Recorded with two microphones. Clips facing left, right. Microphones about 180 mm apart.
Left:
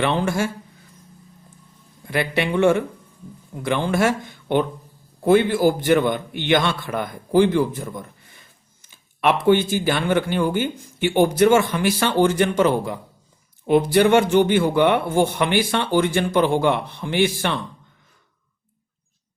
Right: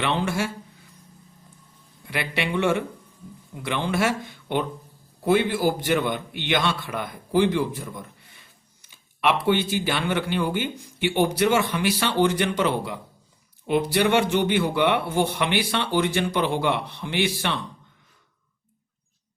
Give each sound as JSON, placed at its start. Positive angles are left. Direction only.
{"t": 0.0, "sound": "speech", "side_deg": 45}
{"t": 2.0, "sound": "speech", "side_deg": 45}